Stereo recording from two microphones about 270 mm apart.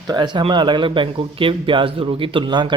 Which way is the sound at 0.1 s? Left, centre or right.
Centre.